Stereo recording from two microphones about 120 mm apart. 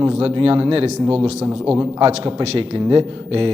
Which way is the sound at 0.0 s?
55° right (ahead or behind).